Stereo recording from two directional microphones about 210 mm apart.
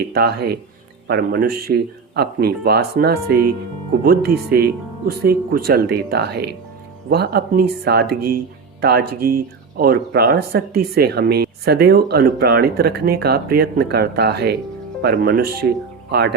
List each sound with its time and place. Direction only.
0.0 s speech: 50° right (ahead or behind)